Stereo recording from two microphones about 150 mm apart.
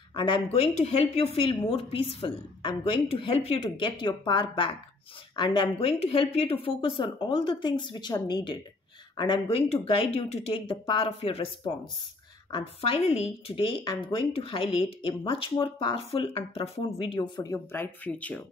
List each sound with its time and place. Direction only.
0.1 s a woman's voice: 35° left (ahead or behind)
17.4 s speech: 15° left (ahead or behind)